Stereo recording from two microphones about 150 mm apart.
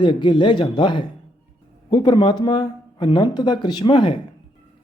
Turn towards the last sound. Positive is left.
turn(degrees=35)  # may be behind; listen again after turning